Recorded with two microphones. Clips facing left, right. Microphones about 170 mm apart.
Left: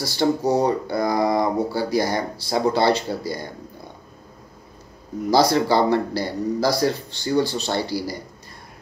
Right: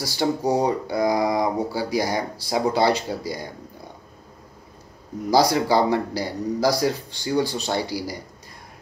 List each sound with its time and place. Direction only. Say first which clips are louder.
0.0 s speech: left 2 dB; 10° right (ahead or behind)
5.3 s speech: left 1 dB; 10° right (ahead or behind)